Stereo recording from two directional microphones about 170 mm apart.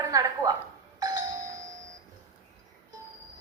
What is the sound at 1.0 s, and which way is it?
Doorbell, 20° right (ahead or behind).